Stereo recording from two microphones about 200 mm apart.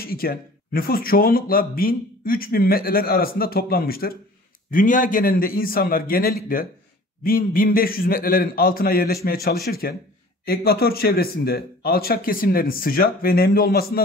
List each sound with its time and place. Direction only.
0.0 s speech: 50° left (ahead or behind)